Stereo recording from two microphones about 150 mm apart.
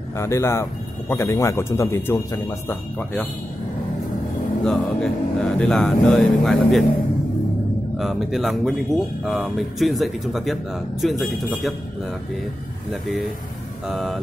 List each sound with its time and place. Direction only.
0.2 s speech: 20° left (ahead or behind)
4.6 s speech: 5° left (ahead or behind)
8.0 s speech: centre (ahead or behind)
13.8 s speech: centre (ahead or behind)